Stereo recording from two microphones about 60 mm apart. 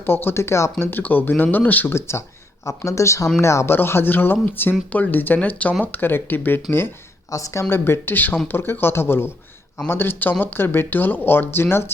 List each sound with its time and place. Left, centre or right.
0.0 s speech: left
0.9 s speech: left
1.9 s speech: left
2.6 s speech: left
3.7 s speech: left
7.3 s speech: left
7.7 s speech: left